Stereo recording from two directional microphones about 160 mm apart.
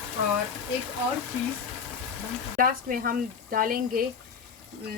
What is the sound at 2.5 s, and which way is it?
Speech, 60° right (ahead or behind).